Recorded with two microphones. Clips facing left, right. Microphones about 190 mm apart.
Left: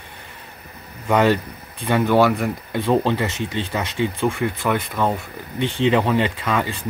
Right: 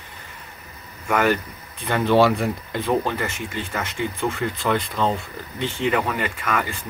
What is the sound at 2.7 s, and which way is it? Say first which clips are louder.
Speech: left 5 dB; 20° left (ahead or behind).